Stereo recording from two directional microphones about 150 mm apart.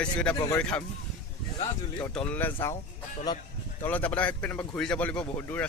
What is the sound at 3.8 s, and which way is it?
Speech, 10° left (ahead or behind).